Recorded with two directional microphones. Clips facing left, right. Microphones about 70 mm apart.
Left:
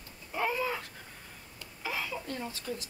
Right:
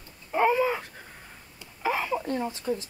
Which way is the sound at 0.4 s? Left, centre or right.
Right.